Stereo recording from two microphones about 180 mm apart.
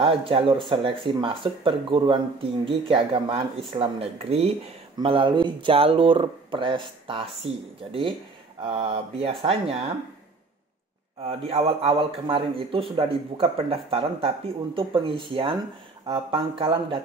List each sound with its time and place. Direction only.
0.0 s a man's voice: 30° right (ahead or behind)
11.2 s a man's voice: 35° right (ahead or behind)